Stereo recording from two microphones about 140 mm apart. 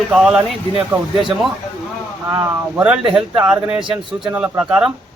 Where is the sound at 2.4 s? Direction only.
10° right (ahead or behind).